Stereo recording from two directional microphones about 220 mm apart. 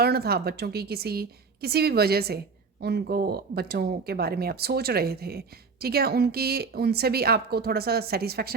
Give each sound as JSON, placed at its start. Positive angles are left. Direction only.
{"t": 0.0, "sound": "speech", "side_deg": -45}